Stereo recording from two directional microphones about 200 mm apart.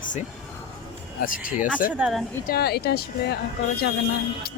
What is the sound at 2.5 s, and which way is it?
Speech, 50° left (ahead or behind).